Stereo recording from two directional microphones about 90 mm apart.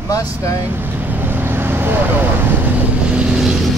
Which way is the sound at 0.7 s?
20° right (ahead or behind).